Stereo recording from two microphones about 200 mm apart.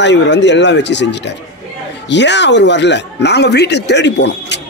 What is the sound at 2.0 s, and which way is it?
Speech, 60° left (ahead or behind).